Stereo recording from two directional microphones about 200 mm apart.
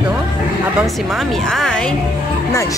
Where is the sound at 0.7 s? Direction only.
Centre (ahead or behind).